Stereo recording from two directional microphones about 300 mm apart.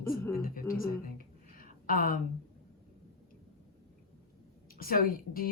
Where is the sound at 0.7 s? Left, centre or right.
Left.